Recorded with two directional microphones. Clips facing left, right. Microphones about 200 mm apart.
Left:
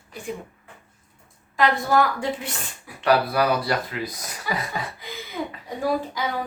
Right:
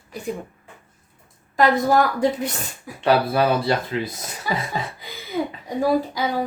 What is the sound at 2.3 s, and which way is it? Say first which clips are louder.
Speech: right 3 dB; 40° right (ahead or behind).